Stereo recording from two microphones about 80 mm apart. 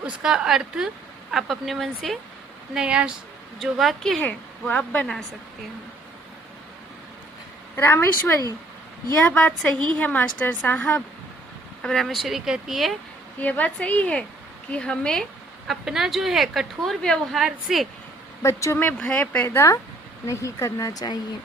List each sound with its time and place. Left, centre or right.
0.0 s a woman's voice: centre
2.7 s a woman's voice: centre
4.2 s speech: centre
7.8 s a woman's voice: left
9.4 s a woman's voice: centre
11.8 s speech: centre
13.4 s speech: centre
15.6 s speech: centre
18.4 s speech: left
18.8 s a woman's voice: left
19.5 s speech: left